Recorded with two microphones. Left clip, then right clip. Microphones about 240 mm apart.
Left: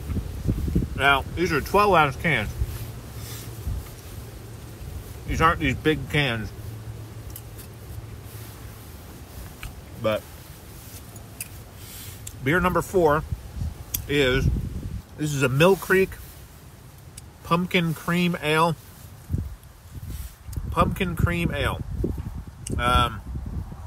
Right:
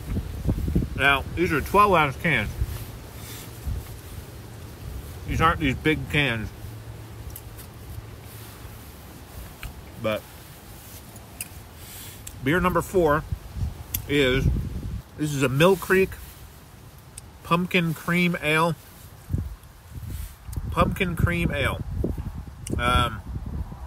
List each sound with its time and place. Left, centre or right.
0.9 s speech: centre
5.3 s speech: centre
9.6 s a sound: centre
12.4 s speech: centre
17.5 s speech: centre
20.7 s speech: centre